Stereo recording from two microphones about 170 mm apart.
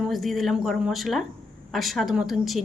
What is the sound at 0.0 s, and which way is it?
Speech, centre (ahead or behind).